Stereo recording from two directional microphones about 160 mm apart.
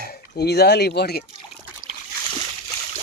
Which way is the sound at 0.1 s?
90° left.